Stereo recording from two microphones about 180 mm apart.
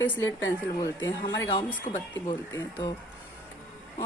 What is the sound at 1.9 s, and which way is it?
Speech, 40° left (ahead or behind).